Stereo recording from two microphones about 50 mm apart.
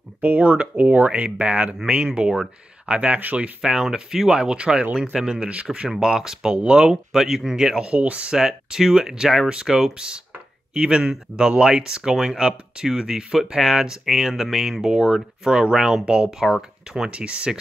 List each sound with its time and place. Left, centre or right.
0.2 s speech: right
3.6 s speech: centre
5.9 s speech: centre
6.5 s speech: right
7.1 s speech: centre; by 8.4 s right
8.4 s speech: centre